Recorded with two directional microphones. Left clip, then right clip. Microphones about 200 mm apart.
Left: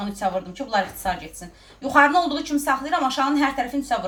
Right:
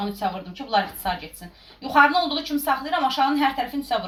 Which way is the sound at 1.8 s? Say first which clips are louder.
Left 1 dB; 20° left (ahead or behind).